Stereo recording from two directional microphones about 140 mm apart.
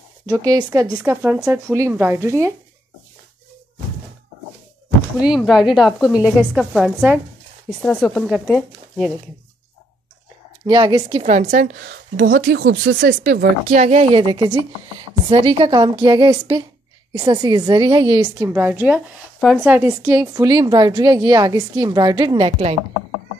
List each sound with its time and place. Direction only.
0.3 s a woman's voice: 25° right (ahead or behind)
5.2 s a woman's voice: 5° right (ahead or behind)
10.6 s speech: 35° right (ahead or behind)
11.2 s a woman's voice: 65° right (ahead or behind); by 18.5 s 35° right (ahead or behind)
18.5 s a woman's voice: 15° right (ahead or behind); by 22.8 s 45° right (ahead or behind)